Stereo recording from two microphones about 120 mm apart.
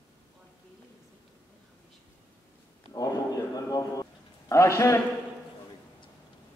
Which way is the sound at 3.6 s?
30° left (ahead or behind).